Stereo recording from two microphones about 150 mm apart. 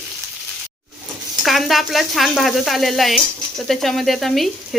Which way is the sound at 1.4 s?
Centre (ahead or behind).